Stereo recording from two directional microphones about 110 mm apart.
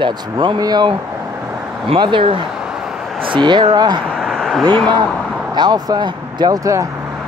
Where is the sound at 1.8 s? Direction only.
55° right (ahead or behind).